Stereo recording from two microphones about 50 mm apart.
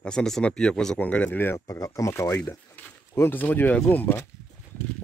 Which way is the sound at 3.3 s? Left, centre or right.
Left.